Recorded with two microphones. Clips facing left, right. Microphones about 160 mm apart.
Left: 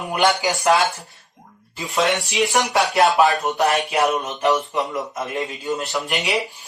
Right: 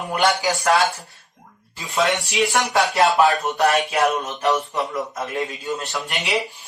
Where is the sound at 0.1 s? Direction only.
20° left (ahead or behind).